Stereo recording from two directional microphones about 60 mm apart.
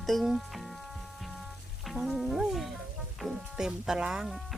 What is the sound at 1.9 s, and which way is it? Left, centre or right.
Music, centre.